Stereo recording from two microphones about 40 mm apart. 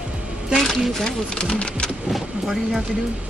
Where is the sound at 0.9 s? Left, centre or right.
Centre.